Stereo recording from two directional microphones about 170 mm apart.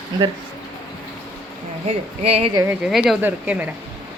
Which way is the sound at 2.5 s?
15° right (ahead or behind).